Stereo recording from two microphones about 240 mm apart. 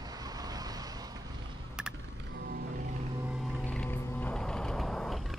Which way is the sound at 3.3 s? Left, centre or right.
Centre.